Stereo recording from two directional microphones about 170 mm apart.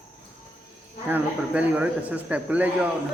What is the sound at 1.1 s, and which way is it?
A man's voice, 10° right (ahead or behind).